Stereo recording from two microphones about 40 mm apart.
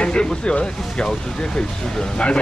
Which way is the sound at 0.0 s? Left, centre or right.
Left.